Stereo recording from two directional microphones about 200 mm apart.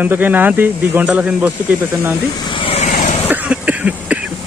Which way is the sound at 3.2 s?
5° right (ahead or behind).